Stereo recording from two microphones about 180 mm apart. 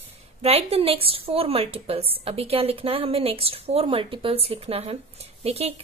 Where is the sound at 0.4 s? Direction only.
35° right (ahead or behind).